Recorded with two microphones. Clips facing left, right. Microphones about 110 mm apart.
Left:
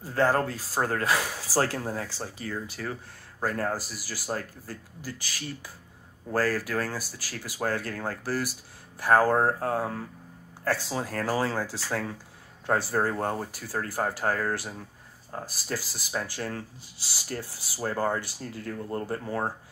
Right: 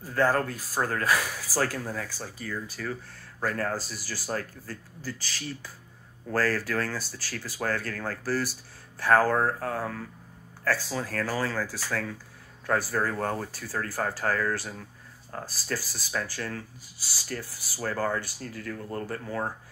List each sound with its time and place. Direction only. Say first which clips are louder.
0.0 s speech: left 1 dB; 25° left (ahead or behind)
6.3 s speech: even; 10° left (ahead or behind)
9.4 s speech: left 2 dB; 30° left (ahead or behind)